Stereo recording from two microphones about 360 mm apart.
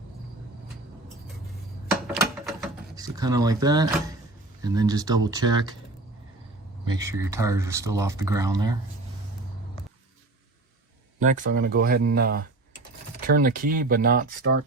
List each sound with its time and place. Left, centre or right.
2.1 s a sound: centre
4.6 s speech: centre
6.8 s speech: centre
11.2 s speech: right